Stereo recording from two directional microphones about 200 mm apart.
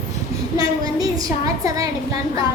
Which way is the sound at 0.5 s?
20° right (ahead or behind).